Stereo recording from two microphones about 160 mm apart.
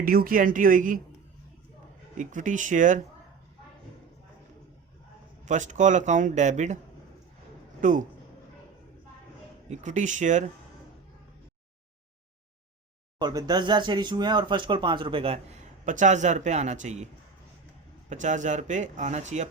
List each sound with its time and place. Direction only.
0.0 s speech: 65° right (ahead or behind)
2.1 s speech: 50° right (ahead or behind)
5.5 s speech: 50° right (ahead or behind)
7.8 s speech: 55° right (ahead or behind)
9.6 s speech: 45° right (ahead or behind)
13.1 s speech: 25° right (ahead or behind); by 17.1 s 45° right (ahead or behind)
18.1 s speech: 50° right (ahead or behind)